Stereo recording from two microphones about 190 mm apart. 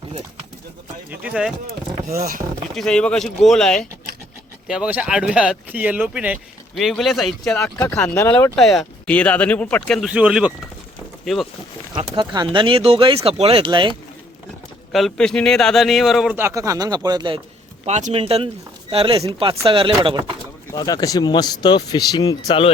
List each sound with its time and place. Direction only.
1.1 s speech: 5° right (ahead or behind)
2.0 s speech: 50° right (ahead or behind)
2.7 s speech: 5° left (ahead or behind)
11.9 s speech: 25° right (ahead or behind)
14.9 s speech: centre (ahead or behind)
16.4 s speech: 15° right (ahead or behind)
17.8 s speech: 35° right (ahead or behind)
20.7 s speech: 20° left (ahead or behind)